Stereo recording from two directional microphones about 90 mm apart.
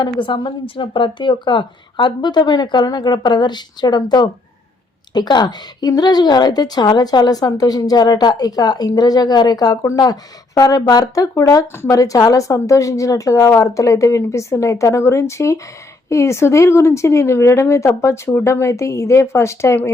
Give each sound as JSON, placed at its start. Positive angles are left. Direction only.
{"t": 0.0, "sound": "a woman's voice", "side_deg": 60}
{"t": 11.7, "sound": "a woman's voice", "side_deg": 25}
{"t": 11.9, "sound": "speech", "side_deg": 40}